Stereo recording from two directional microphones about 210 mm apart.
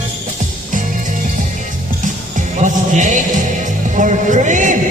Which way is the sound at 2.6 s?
35° right (ahead or behind).